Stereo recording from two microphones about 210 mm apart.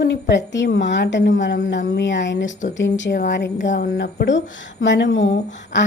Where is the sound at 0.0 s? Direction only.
55° left (ahead or behind).